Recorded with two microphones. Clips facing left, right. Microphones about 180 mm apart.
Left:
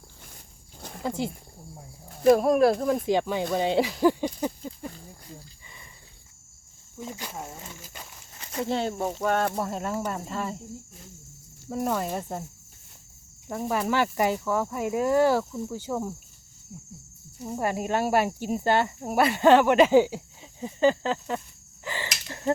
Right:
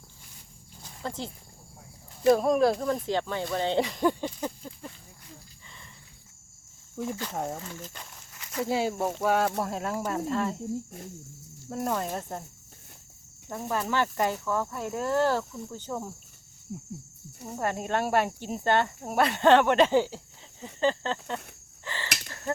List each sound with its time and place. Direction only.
0.8 s a sound: 60° left (ahead or behind)
1.0 s speech: 10° left (ahead or behind)
7.8 s speech: 10° left (ahead or behind)
8.6 s speech: 5° right (ahead or behind)
11.7 s speech: 5° left (ahead or behind)
13.5 s speech: 10° left (ahead or behind)
17.6 s speech: 5° left (ahead or behind)
21.8 s a sound: 15° left (ahead or behind)